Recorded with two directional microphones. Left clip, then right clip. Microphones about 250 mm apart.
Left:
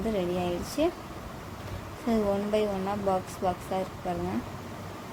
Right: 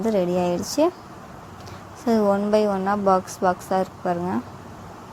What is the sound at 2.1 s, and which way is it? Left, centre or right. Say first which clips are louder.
A woman's voice: right 8 dB; right.